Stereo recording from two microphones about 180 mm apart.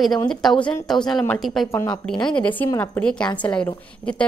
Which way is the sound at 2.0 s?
5° left (ahead or behind).